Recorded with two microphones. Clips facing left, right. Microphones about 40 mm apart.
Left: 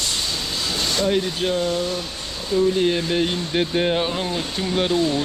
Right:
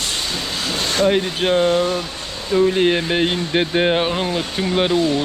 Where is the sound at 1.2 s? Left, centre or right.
Right.